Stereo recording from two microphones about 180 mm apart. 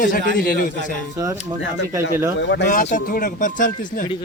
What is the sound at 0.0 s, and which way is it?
Speech, 50° left (ahead or behind).